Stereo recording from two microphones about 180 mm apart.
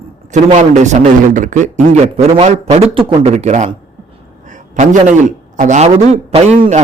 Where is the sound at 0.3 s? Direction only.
40° right (ahead or behind).